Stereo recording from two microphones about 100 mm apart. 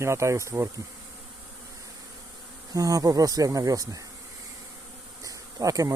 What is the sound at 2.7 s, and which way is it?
Speech, 35° right (ahead or behind).